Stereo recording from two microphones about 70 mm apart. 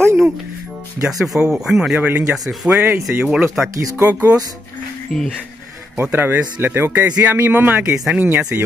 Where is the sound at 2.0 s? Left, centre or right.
Right.